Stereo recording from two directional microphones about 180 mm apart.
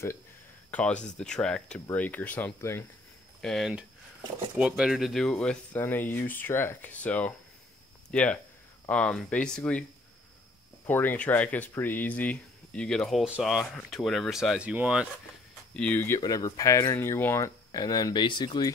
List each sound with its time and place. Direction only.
0.7 s speech: 5° left (ahead or behind)
10.9 s speech: 10° left (ahead or behind); by 15.0 s 5° right (ahead or behind)
15.7 s speech: 5° left (ahead or behind)
16.2 s speech: 20° left (ahead or behind)